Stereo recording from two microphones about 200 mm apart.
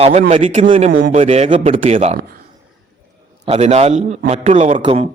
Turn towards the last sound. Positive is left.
turn(degrees=-35)  # may be behind; listen again after turning